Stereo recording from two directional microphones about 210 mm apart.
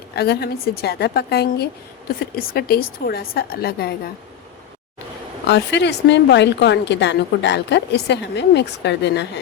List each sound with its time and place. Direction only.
0.2 s a woman's voice: 50° left (ahead or behind)
5.5 s a woman's voice: 55° left (ahead or behind)